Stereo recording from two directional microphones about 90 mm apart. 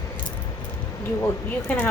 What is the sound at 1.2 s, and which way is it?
Speech, 25° left (ahead or behind).